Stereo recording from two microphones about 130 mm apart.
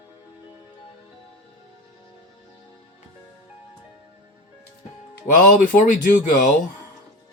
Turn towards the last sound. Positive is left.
turn(degrees=85)